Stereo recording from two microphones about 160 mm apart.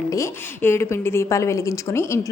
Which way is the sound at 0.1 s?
15° left (ahead or behind).